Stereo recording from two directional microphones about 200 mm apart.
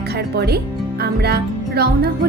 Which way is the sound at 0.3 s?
55° right (ahead or behind).